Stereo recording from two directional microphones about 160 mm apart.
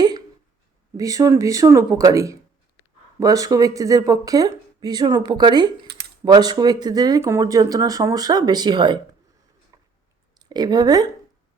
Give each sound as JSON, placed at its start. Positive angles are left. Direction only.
{"t": 0.9, "sound": "speech", "side_deg": -20}
{"t": 5.9, "sound": "typing", "side_deg": -90}
{"t": 6.2, "sound": "speech", "side_deg": -25}
{"t": 9.7, "sound": "a sound", "side_deg": -25}
{"t": 10.3, "sound": "speech", "side_deg": -25}